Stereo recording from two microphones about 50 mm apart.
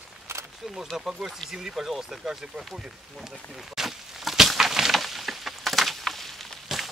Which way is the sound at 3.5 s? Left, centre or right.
Centre.